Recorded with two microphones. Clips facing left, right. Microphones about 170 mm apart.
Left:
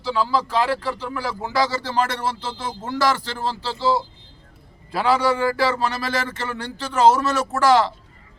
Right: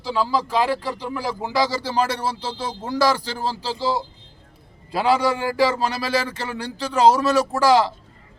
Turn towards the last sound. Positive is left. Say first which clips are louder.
# even
turn(degrees=-15)  # may be behind; listen again after turning